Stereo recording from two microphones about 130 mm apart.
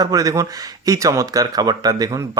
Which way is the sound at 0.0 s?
25° right (ahead or behind).